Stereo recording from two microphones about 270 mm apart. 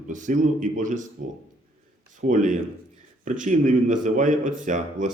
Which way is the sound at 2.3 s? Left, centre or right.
Right.